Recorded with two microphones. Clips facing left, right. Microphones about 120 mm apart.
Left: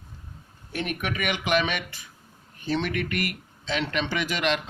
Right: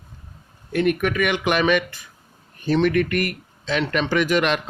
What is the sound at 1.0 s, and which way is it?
Speech, 50° right (ahead or behind).